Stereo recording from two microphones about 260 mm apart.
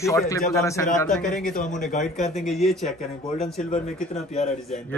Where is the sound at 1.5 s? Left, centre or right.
Left.